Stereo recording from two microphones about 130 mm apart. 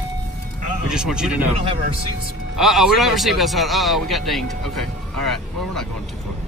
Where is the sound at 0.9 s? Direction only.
5° right (ahead or behind).